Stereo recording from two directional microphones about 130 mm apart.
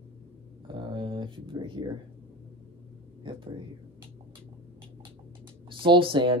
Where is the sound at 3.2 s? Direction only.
40° right (ahead or behind).